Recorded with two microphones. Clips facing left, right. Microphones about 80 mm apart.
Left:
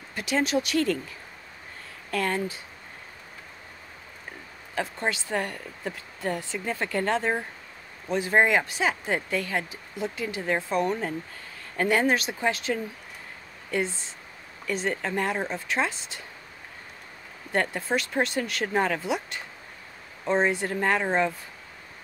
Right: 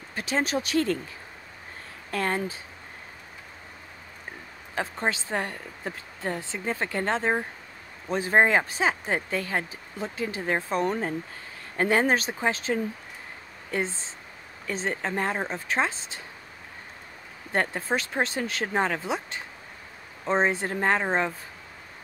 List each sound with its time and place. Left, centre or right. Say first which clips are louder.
0.1 s speech: left 2 dB; right
2.0 s speech: even; right
4.7 s speech: right 1 dB; right
17.5 s speech: even; right